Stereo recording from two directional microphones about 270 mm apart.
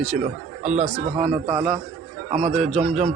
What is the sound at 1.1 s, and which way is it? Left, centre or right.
Speech, right.